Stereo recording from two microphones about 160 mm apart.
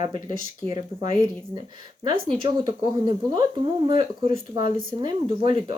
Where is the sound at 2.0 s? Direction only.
30° right (ahead or behind).